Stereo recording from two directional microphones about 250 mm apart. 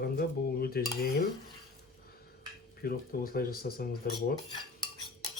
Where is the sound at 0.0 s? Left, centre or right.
Left.